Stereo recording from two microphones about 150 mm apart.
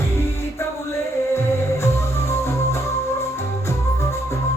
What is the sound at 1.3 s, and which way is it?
Music, 20° left (ahead or behind).